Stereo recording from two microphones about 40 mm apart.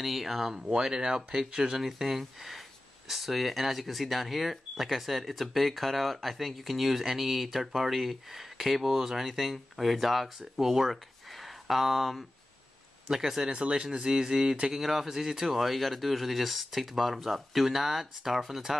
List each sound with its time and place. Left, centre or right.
0.0 s speech: centre
0.5 s speech: centre
13.5 s speech: right; by 18.6 s centre